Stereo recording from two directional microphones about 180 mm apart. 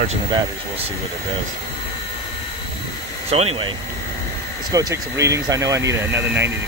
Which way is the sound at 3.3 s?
35° right (ahead or behind).